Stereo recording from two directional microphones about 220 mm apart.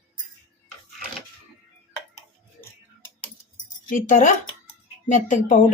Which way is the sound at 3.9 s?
35° left (ahead or behind).